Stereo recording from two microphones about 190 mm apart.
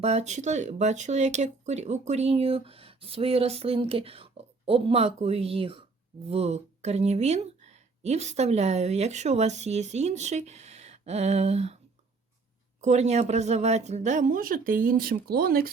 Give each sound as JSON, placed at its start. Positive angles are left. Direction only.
{"t": 0.0, "sound": "speech", "side_deg": -35}
{"t": 12.8, "sound": "speech", "side_deg": -35}